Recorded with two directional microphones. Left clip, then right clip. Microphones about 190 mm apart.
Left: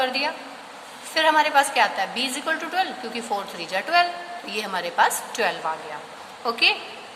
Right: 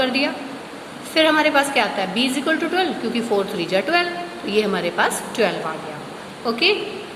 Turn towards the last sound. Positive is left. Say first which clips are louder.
# right 2 dB
turn(degrees=30)  # may be behind; listen again after turning